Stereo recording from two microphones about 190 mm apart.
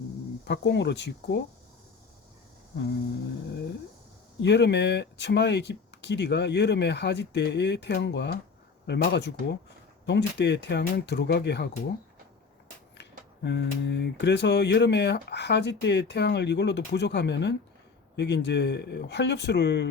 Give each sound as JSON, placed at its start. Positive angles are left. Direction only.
{"t": 0.4, "sound": "speech", "side_deg": 65}
{"t": 4.4, "sound": "speech", "side_deg": 65}
{"t": 13.0, "sound": "speech", "side_deg": 65}